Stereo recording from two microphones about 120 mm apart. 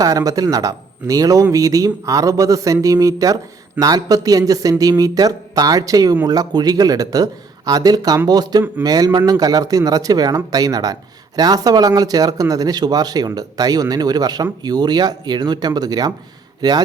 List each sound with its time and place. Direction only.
0.0 s speech: 30° right (ahead or behind)